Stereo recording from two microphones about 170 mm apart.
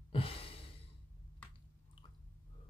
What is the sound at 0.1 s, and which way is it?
Sigh, 35° left (ahead or behind).